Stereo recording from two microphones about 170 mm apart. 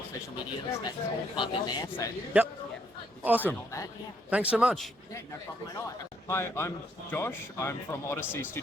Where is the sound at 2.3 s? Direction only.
10° right (ahead or behind).